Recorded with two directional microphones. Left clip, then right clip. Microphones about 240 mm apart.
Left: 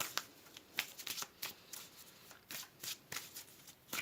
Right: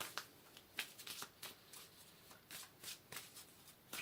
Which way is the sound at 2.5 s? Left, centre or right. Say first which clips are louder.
Left 6 dB; left.